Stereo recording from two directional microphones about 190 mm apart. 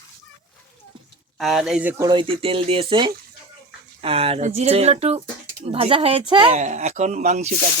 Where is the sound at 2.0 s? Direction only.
25° right (ahead or behind).